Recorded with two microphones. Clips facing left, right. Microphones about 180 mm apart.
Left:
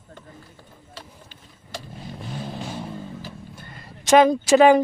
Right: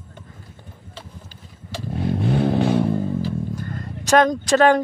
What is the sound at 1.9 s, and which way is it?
Vehicle, 70° right (ahead or behind).